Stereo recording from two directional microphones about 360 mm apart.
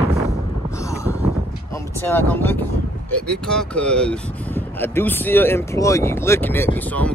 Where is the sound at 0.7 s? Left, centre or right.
Centre.